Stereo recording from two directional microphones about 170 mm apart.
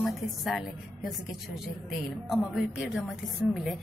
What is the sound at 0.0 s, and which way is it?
A woman's voice, centre (ahead or behind).